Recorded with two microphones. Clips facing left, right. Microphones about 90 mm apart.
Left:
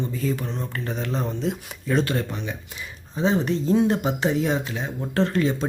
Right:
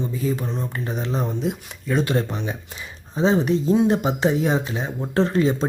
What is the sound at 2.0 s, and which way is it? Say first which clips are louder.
Speech: right 3 dB; 25° right (ahead or behind).